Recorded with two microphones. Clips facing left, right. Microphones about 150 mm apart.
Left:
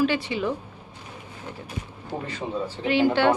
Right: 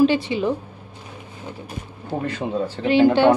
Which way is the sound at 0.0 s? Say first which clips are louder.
Right 6 dB; 25° right (ahead or behind).